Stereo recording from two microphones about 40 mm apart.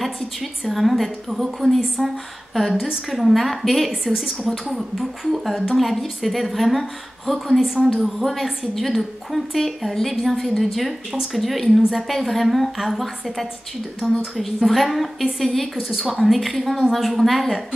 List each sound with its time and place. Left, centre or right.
0.0 s a woman's voice: centre
4.1 s a woman's voice: centre
4.7 s a woman's voice: centre